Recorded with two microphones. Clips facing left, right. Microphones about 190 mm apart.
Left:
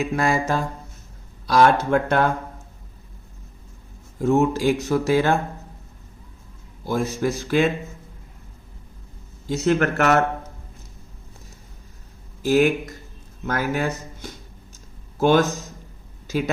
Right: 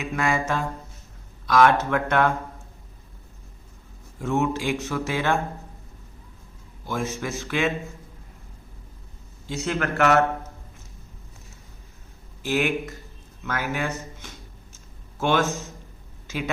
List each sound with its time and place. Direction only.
0.0 s speech: 35° left (ahead or behind)
4.2 s speech: 35° left (ahead or behind)
6.8 s speech: 35° left (ahead or behind)
9.5 s speech: 45° left (ahead or behind)
12.4 s speech: 40° left (ahead or behind)
16.2 s a sound: 40° left (ahead or behind)